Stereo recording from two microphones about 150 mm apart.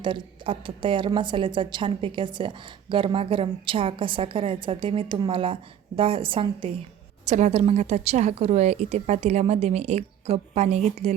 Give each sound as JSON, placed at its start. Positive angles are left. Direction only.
{"t": 0.0, "sound": "a woman's voice", "side_deg": -35}
{"t": 7.3, "sound": "a woman's voice", "side_deg": -50}